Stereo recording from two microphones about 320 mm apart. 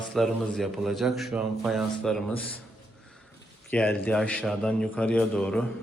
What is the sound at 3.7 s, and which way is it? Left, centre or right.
A man's voice, centre.